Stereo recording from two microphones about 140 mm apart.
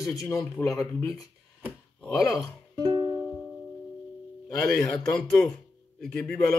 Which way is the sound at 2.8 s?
30° right (ahead or behind).